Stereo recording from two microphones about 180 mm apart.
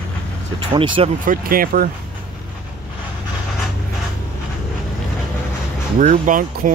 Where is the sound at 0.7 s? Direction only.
30° right (ahead or behind).